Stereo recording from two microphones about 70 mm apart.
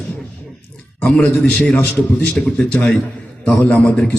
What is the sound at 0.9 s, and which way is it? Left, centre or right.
A man's voice, centre.